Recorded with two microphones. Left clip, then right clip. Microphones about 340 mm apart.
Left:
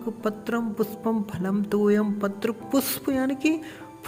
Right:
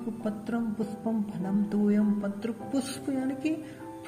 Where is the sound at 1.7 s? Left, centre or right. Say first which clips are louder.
Left 8 dB; left.